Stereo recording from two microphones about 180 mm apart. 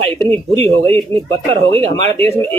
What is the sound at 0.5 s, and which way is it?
Speech, 30° right (ahead or behind).